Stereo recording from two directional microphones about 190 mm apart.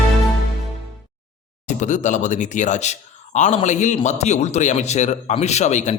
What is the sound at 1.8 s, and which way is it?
Speech, 40° left (ahead or behind).